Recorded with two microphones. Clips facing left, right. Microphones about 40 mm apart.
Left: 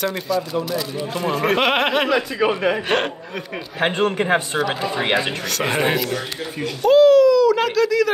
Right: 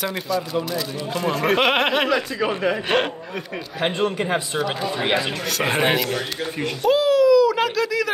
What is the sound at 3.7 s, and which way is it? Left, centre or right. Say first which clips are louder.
Speech: left 3 dB; left.